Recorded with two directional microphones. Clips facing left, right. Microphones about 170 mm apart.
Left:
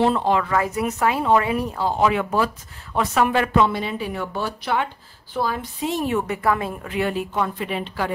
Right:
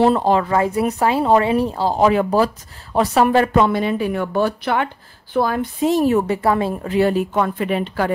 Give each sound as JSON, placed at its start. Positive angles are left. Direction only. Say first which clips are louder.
{"t": 0.0, "sound": "a woman's voice", "louder": "right 4 dB", "side_deg": -40}
{"t": 5.9, "sound": "speech", "louder": "right 7 dB", "side_deg": -40}
{"t": 7.3, "sound": "a woman's voice", "louder": "right 5 dB", "side_deg": -50}